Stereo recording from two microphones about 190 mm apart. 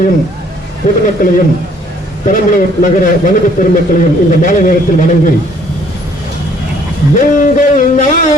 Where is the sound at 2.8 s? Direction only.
45° left (ahead or behind).